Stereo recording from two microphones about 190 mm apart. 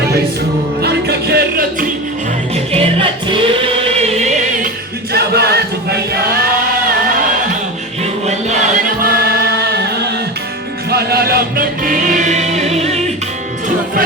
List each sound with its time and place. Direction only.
0.8 s music: 60° right (ahead or behind)
2.7 s choir: 25° right (ahead or behind)
5.1 s chant: 55° right (ahead or behind)
8.3 s choir: 35° right (ahead or behind)
9.0 s chant: 55° right (ahead or behind)
10.9 s music: 55° right (ahead or behind); by 13.0 s 35° right (ahead or behind)